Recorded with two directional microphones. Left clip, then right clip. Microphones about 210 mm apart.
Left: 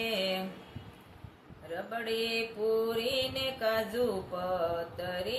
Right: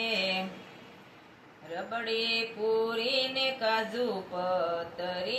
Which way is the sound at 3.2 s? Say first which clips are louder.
Right 3 dB; 20° left (ahead or behind).